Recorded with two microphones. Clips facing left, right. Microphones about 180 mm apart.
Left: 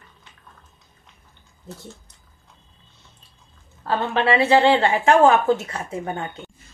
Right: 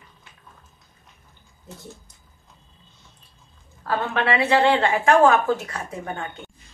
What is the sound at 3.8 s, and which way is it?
A woman's voice, 30° left (ahead or behind).